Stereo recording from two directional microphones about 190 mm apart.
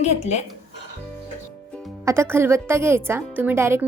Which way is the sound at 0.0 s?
35° left (ahead or behind).